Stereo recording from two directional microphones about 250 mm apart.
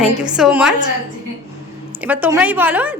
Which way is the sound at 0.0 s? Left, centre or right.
Centre.